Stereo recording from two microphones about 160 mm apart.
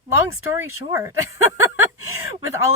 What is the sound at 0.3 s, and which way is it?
Speech, 20° right (ahead or behind).